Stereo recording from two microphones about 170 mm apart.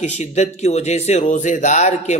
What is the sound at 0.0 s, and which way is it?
Speech, 40° left (ahead or behind).